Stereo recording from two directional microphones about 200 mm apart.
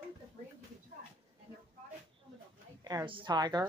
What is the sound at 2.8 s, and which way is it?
Speech, 20° right (ahead or behind).